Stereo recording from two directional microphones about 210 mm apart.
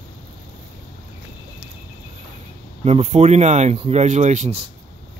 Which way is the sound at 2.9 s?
30° right (ahead or behind).